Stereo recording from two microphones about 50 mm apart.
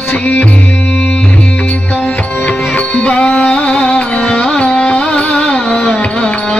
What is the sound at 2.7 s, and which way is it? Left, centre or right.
Music, left.